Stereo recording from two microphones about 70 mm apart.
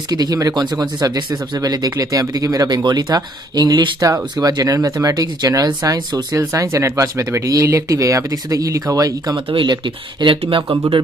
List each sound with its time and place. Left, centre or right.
0.1 s speech: right
4.0 s speech: right
6.3 s speech: right
10.2 s speech: right